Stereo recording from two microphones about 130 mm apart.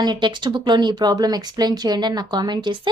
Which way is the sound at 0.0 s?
35° right (ahead or behind).